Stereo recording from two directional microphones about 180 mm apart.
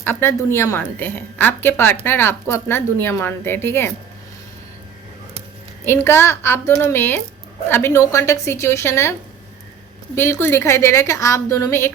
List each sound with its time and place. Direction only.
0.0 s a woman's voice: 15° left (ahead or behind)
5.8 s a woman's voice: 15° left (ahead or behind)
10.2 s a woman's voice: 15° left (ahead or behind)